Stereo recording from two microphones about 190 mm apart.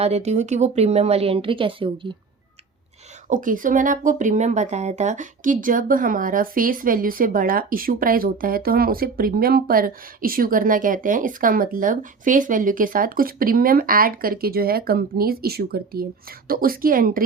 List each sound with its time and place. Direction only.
0.0 s speech: 35° right (ahead or behind)
3.2 s speech: 45° right (ahead or behind)